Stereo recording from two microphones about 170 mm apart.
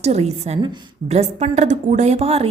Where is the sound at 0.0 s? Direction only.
40° right (ahead or behind).